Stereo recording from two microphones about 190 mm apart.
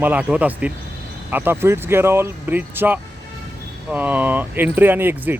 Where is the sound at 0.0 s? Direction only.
5° right (ahead or behind).